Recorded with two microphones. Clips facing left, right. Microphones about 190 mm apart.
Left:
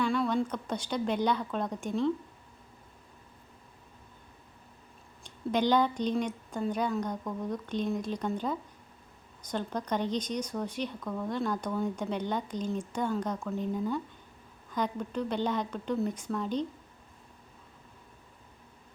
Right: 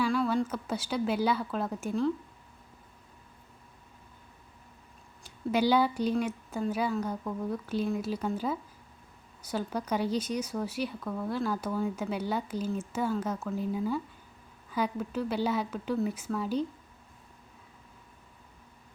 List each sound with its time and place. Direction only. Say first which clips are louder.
0.0 s speech: right 1 dB; centre (ahead or behind)
5.2 s speech: right 1 dB; 5° right (ahead or behind)